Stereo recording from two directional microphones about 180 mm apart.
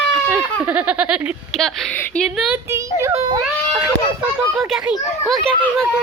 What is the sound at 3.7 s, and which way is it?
Speech, 5° right (ahead or behind).